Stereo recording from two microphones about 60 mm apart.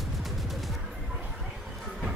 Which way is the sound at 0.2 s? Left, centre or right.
Centre.